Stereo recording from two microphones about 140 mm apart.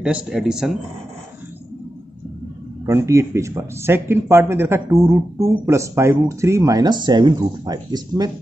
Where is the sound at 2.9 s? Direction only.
20° right (ahead or behind).